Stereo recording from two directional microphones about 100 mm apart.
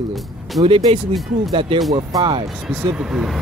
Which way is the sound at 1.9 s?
35° right (ahead or behind).